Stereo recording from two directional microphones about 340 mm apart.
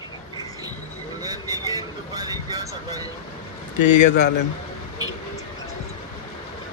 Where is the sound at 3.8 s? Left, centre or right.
Left.